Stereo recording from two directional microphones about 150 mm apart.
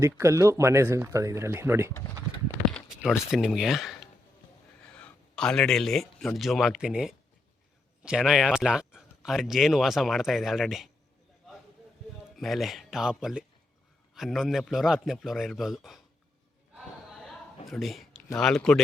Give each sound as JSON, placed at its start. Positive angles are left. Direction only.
{"t": 0.0, "sound": "speech", "side_deg": -20}
{"t": 1.9, "sound": "speech", "side_deg": 20}
{"t": 3.0, "sound": "speech", "side_deg": -5}
{"t": 12.4, "sound": "speech", "side_deg": 0}
{"t": 17.1, "sound": "a sound", "side_deg": 0}
{"t": 17.7, "sound": "speech", "side_deg": 0}